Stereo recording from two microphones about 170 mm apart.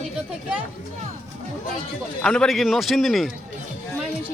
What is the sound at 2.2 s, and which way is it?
A man's voice, 5° left (ahead or behind).